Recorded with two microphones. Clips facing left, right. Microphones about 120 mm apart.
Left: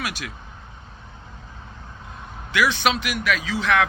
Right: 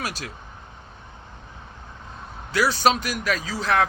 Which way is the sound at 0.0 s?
35° right (ahead or behind).